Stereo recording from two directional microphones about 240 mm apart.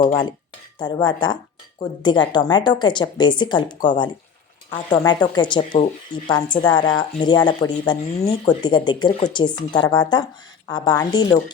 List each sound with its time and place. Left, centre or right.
0.0 s a woman's voice: centre